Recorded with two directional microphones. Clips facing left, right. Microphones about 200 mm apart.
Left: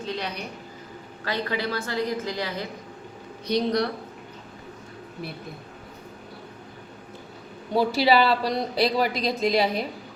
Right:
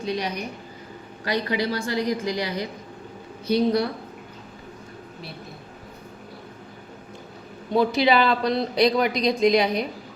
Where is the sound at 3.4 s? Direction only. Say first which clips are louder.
Right 3 dB; 5° right (ahead or behind).